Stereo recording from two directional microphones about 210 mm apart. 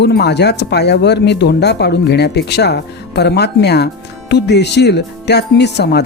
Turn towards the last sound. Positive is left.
turn(degrees=55)  # may be behind; listen again after turning